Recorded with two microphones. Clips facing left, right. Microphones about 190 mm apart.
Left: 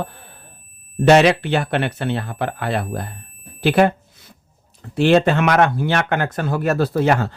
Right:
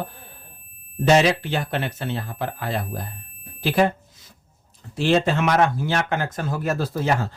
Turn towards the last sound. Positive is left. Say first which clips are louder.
# left 6 dB
turn(degrees=65)  # may be behind; listen again after turning